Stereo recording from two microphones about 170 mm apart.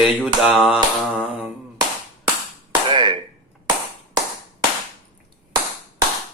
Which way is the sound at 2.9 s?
25° right (ahead or behind).